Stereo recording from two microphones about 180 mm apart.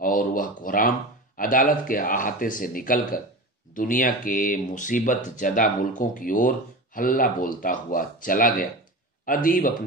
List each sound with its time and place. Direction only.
0.0 s speech: 50° left (ahead or behind)